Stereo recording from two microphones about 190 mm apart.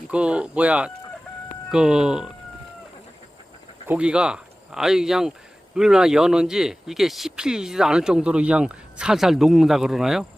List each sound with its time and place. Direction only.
0.1 s speech: 5° right (ahead or behind)
3.8 s speech: 5° right (ahead or behind)